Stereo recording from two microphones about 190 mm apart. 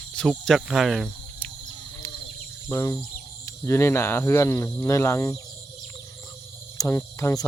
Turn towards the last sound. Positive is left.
turn(degrees=15)  # may be behind; listen again after turning